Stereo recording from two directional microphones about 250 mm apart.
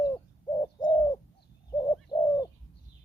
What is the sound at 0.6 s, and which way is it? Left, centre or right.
Bird, centre.